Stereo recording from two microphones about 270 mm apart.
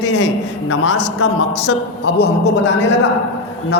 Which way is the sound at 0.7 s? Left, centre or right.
Left.